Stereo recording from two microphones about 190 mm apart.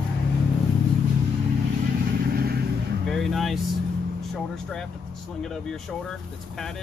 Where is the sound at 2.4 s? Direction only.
55° right (ahead or behind).